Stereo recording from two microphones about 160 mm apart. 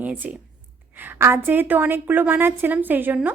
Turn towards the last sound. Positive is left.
turn(degrees=-10)  # may be behind; listen again after turning